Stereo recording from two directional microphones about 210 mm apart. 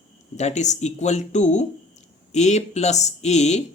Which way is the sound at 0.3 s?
35° left (ahead or behind).